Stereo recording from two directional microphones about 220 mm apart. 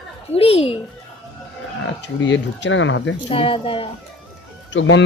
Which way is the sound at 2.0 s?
55° left (ahead or behind).